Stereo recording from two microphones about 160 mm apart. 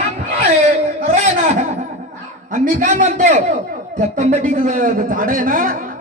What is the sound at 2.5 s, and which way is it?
A man's voice, 50° right (ahead or behind).